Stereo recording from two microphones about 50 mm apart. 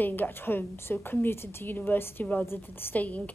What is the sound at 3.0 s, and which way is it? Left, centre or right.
Speech, left.